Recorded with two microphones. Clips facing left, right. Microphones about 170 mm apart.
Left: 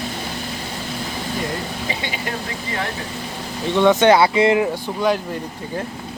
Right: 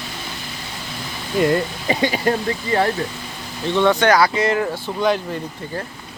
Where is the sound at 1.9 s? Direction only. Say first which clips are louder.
Right 12 dB; 40° right (ahead or behind).